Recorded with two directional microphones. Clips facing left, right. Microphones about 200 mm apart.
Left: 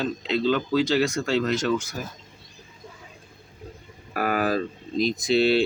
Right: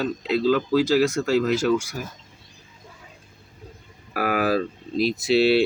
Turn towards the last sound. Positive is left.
turn(degrees=-5)  # may be behind; listen again after turning